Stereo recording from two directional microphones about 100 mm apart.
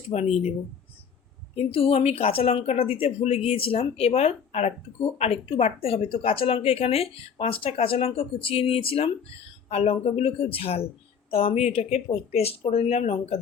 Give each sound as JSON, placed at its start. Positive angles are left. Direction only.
{"t": 0.1, "sound": "speech", "side_deg": 90}
{"t": 1.5, "sound": "speech", "side_deg": 80}
{"t": 9.6, "sound": "speech", "side_deg": 90}